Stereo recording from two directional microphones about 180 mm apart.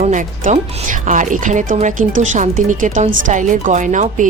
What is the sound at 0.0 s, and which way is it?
A woman's voice, 45° right (ahead or behind).